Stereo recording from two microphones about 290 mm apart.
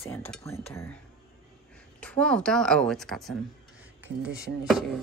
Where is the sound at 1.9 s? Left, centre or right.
Centre.